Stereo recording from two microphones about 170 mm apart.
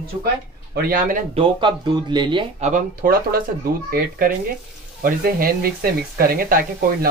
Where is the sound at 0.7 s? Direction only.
60° right (ahead or behind).